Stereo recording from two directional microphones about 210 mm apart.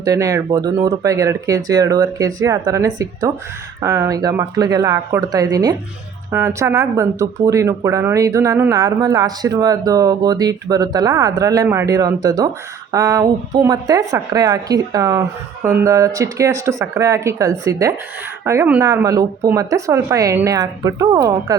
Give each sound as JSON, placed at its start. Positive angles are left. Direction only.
{"t": 0.0, "sound": "speech", "side_deg": -15}